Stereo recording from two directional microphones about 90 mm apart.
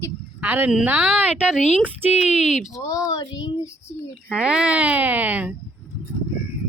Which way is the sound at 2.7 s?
40° left (ahead or behind).